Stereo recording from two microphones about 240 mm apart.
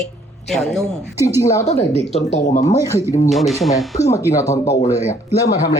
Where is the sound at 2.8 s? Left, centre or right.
Centre.